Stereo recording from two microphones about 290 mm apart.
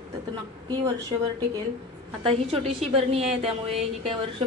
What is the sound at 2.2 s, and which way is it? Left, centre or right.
A woman's voice, centre.